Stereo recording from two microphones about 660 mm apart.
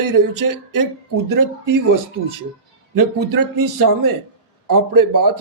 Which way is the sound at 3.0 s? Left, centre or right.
Right.